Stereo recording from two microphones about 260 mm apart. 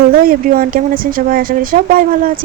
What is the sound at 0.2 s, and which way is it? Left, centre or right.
Speech, right.